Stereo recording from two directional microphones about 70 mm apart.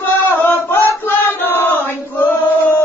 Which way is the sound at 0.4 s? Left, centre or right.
Left.